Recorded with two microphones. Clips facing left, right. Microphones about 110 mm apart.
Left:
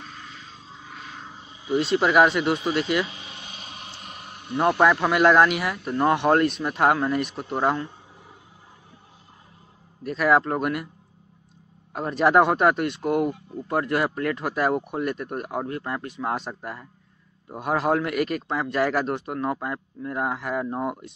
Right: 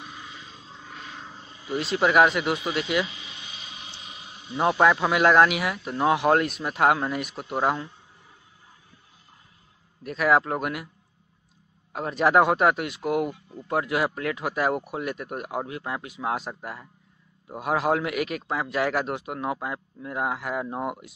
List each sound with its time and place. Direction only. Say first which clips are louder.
0.0 s vehicle: even; 10° right (ahead or behind); by 1.7 s 15° left (ahead or behind)
1.7 s speech: left 2 dB; centre (ahead or behind)
3.1 s a sound: left 2 dB; 40° left (ahead or behind)
4.6 s speech: left 1 dB; centre (ahead or behind)
10.0 s speech: left 1 dB; centre (ahead or behind)
11.9 s speech: left 2 dB; centre (ahead or behind)